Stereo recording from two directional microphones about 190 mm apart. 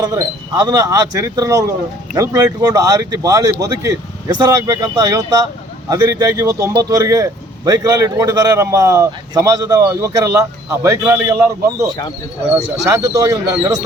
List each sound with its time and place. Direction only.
0.0 s speech: 20° right (ahead or behind)